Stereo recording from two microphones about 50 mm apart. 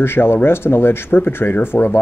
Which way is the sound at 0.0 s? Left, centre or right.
Left.